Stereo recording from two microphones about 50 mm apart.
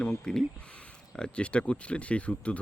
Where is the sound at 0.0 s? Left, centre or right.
Centre.